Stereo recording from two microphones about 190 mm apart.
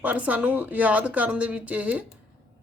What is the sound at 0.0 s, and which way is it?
A woman's voice, 5° right (ahead or behind).